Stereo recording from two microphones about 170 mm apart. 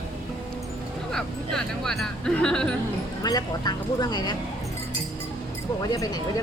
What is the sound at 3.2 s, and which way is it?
Speech, 25° left (ahead or behind).